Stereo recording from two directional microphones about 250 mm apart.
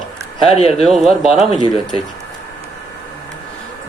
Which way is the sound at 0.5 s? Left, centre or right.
Left.